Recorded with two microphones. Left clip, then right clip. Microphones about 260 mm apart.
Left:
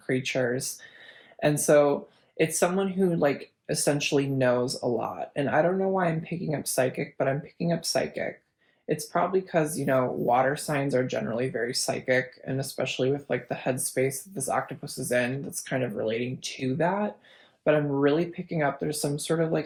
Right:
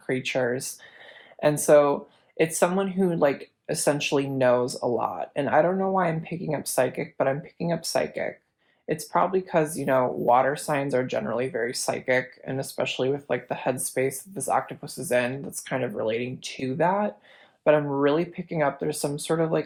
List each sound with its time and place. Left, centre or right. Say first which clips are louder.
0.1 s speech: right 1 dB; right